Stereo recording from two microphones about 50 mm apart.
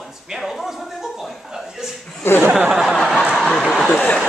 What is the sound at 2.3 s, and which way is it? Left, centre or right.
Speech, left.